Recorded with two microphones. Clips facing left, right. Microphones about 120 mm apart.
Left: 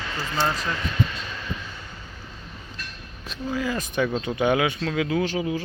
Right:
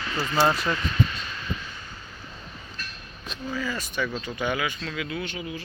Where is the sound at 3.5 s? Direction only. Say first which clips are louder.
Left 5 dB; 45° left (ahead or behind).